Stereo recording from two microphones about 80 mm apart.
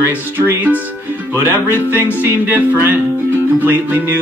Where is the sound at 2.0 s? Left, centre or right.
Right.